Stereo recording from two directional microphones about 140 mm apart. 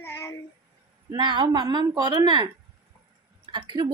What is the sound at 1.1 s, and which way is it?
A woman's voice, 30° right (ahead or behind).